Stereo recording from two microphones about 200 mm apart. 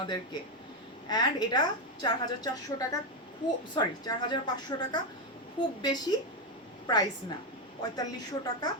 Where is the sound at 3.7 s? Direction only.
20° left (ahead or behind).